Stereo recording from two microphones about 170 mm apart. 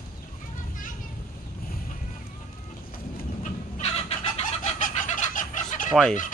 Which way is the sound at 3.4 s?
40° left (ahead or behind).